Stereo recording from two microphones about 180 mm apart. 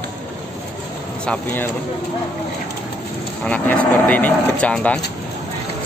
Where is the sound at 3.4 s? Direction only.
5° left (ahead or behind).